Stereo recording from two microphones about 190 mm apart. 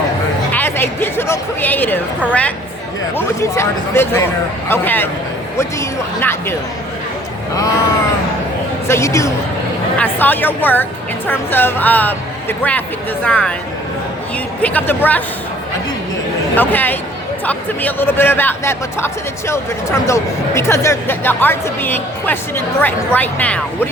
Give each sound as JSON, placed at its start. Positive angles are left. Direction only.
{"t": 0.5, "sound": "a sound", "side_deg": 10}
{"t": 3.2, "sound": "speech", "side_deg": 15}
{"t": 8.9, "sound": "speech", "side_deg": 15}
{"t": 14.6, "sound": "speech", "side_deg": 10}
{"t": 16.6, "sound": "speech", "side_deg": 10}